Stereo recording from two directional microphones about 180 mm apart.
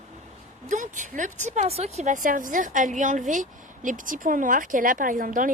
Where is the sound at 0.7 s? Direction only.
45° right (ahead or behind).